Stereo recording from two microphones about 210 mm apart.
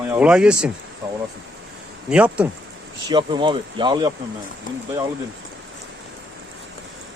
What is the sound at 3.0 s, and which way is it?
Speech, 20° right (ahead or behind).